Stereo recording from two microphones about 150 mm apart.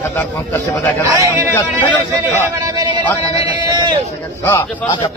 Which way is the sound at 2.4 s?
25° right (ahead or behind).